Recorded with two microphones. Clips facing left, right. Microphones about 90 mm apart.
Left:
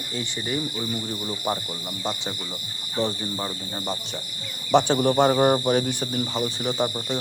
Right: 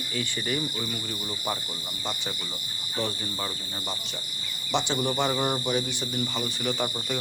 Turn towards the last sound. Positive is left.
turn(degrees=30)  # may be behind; listen again after turning